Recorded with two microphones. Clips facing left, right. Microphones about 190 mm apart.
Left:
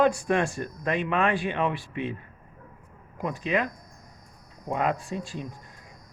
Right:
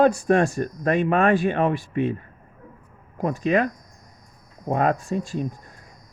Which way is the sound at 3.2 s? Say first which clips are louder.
Right 6 dB; 45° right (ahead or behind).